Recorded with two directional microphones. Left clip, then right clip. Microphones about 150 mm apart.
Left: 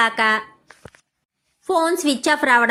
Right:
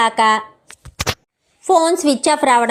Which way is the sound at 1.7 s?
30° right (ahead or behind).